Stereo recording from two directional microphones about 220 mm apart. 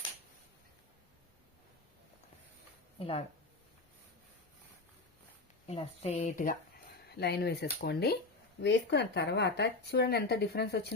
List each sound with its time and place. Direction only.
3.0 s speech: 25° left (ahead or behind)
5.6 s speech: 25° left (ahead or behind); by 10.9 s 50° left (ahead or behind)